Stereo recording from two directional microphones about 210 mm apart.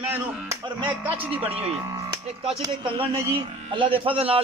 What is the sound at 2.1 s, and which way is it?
Speech, 20° right (ahead or behind).